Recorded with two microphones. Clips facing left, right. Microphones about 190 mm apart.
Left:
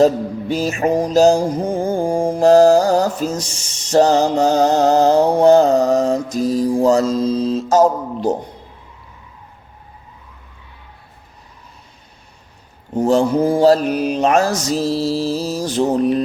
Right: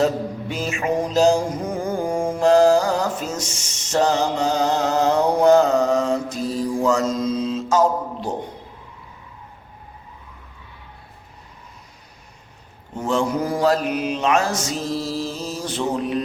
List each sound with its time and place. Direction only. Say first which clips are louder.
0.0 s music: left 6 dB; 35° left (ahead or behind)
12.9 s music: left 7 dB; 35° left (ahead or behind)
13.9 s music: left 5 dB; 40° left (ahead or behind)